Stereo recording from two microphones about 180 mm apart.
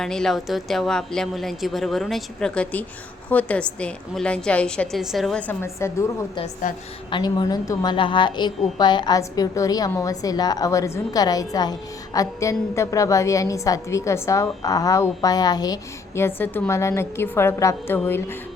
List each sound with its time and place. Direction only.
0.0 s a woman's voice: 5° left (ahead or behind)
6.6 s a woman's voice: 45° left (ahead or behind)
7.1 s a woman's voice: 25° left (ahead or behind)